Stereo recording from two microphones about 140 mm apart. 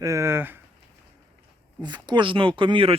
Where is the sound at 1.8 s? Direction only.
30° right (ahead or behind).